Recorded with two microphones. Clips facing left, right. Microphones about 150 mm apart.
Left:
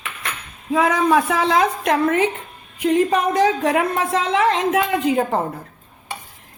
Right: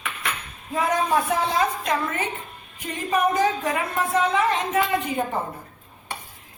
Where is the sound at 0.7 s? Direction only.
90° left.